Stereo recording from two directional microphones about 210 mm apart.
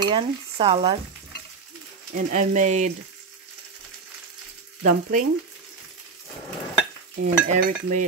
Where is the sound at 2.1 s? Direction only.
35° right (ahead or behind).